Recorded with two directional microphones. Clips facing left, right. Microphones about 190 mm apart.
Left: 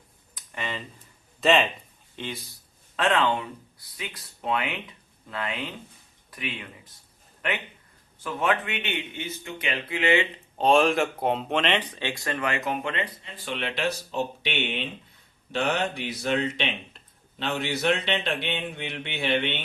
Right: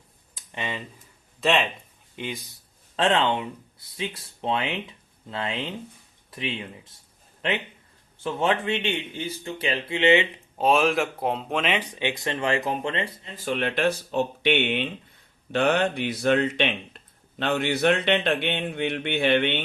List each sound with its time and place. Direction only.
0.3 s a sound: 20° right (ahead or behind)
1.4 s speech: centre (ahead or behind)
2.1 s speech: 15° right (ahead or behind)
2.9 s speech: 30° right (ahead or behind)
10.6 s speech: 5° right (ahead or behind); by 13.3 s 30° right (ahead or behind)
13.3 s speech: 45° right (ahead or behind)